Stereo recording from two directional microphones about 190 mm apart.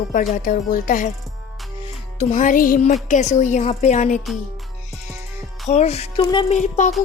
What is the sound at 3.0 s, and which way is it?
A woman's voice, 40° left (ahead or behind).